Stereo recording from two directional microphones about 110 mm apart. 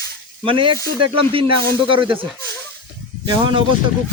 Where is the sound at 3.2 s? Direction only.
45° right (ahead or behind).